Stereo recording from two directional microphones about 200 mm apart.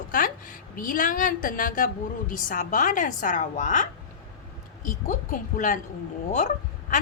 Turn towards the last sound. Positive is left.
turn(degrees=40)  # may be behind; listen again after turning